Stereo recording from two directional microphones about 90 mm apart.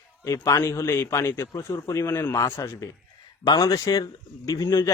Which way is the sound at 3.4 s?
50° left (ahead or behind).